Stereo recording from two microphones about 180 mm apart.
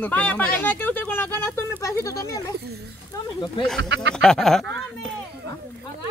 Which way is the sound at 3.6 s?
Centre (ahead or behind).